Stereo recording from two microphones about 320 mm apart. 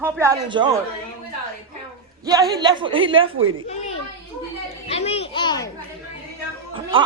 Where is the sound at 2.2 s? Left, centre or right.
Centre.